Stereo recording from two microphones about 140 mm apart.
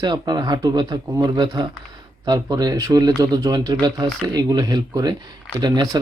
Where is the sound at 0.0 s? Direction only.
30° right (ahead or behind).